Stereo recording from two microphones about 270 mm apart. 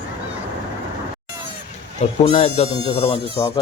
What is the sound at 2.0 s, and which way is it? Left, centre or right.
Speech, left.